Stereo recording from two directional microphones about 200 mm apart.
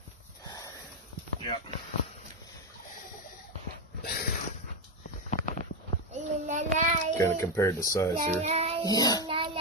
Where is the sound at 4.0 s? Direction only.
50° left (ahead or behind).